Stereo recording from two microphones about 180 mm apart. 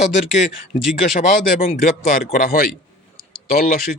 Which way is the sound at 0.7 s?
45° left (ahead or behind).